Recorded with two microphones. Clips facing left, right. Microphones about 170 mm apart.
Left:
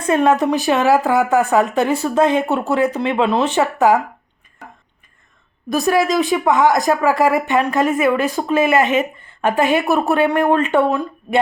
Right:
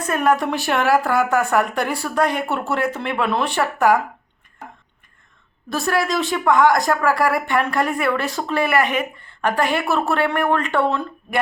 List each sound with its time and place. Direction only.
0.0 s speech: 25° left (ahead or behind)
5.6 s speech: 15° left (ahead or behind)